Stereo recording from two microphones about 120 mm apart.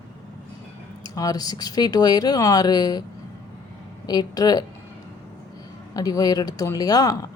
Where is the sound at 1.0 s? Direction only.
30° left (ahead or behind).